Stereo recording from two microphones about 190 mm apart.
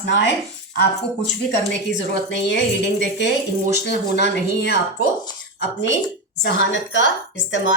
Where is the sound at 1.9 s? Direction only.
70° left (ahead or behind).